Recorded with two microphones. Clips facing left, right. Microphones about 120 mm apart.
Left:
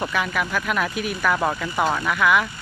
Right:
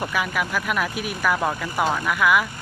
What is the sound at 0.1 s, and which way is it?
Speech, 10° right (ahead or behind).